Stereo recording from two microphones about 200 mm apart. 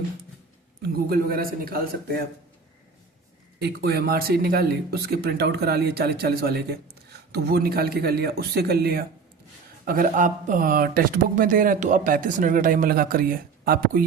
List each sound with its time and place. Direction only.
0.8 s speech: 50° right (ahead or behind)
3.6 s speech: 55° right (ahead or behind)